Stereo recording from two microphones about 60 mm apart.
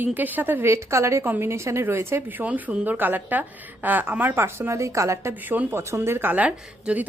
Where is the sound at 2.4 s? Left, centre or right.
Right.